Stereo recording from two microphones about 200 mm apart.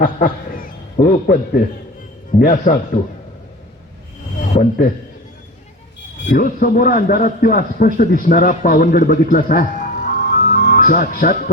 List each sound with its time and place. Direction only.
0.0 s a sound: 45° left (ahead or behind)
2.4 s a man's voice: 45° left (ahead or behind)
6.2 s a man's voice: 45° left (ahead or behind)